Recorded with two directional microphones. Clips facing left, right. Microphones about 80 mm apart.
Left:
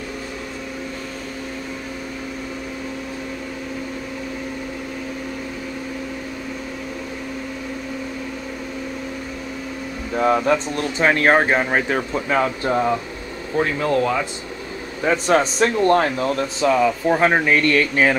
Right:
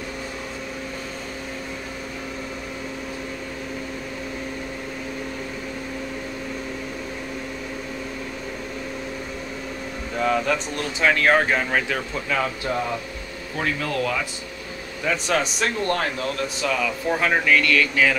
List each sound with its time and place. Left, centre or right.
10.1 s speech: left